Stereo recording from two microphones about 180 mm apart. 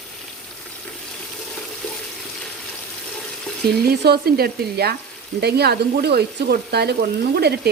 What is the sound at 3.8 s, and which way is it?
Speech, 60° right (ahead or behind).